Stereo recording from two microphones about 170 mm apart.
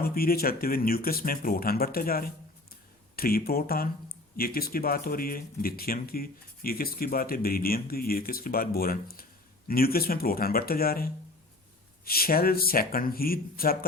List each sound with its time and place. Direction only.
0.0 s speech: 60° left (ahead or behind)